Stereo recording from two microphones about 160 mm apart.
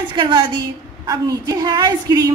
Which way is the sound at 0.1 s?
30° right (ahead or behind).